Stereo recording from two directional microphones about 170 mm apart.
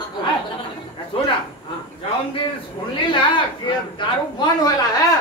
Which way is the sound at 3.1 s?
30° left (ahead or behind).